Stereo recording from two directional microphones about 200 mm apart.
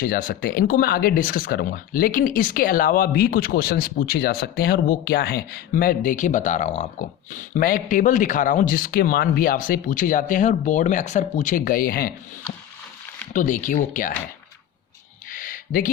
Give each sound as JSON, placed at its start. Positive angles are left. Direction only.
{"t": 0.0, "sound": "speech", "side_deg": 45}
{"t": 13.3, "sound": "speech", "side_deg": 40}
{"t": 15.3, "sound": "a sound", "side_deg": 45}